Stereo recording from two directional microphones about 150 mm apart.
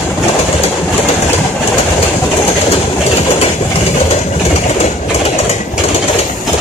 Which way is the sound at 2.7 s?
45° left (ahead or behind).